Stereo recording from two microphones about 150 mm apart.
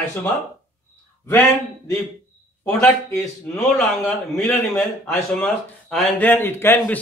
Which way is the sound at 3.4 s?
10° left (ahead or behind).